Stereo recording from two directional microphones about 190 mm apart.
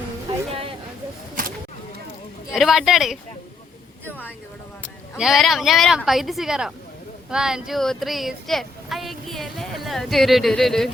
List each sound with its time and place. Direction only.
0.3 s a sound: 30° right (ahead or behind)
2.6 s speech: centre (ahead or behind)
5.1 s speech: centre (ahead or behind)